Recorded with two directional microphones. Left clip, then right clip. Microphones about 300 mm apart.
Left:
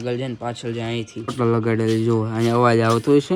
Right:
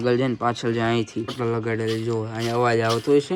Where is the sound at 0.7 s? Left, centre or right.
Centre.